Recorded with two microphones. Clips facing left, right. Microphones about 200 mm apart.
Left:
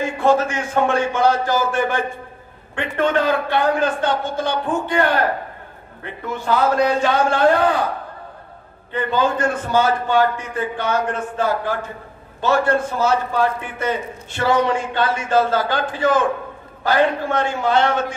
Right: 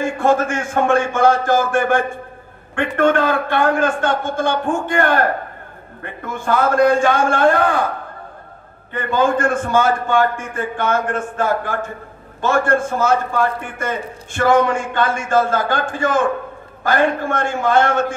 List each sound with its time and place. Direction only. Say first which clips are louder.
0.0 s a man's voice: right 1 dB; 50° right (ahead or behind)
8.9 s a man's voice: right 2 dB; 50° right (ahead or behind)